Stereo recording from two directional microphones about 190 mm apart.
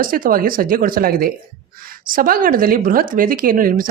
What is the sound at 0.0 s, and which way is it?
A woman's voice, 45° right (ahead or behind).